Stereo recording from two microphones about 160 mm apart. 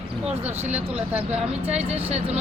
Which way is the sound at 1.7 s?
40° right (ahead or behind).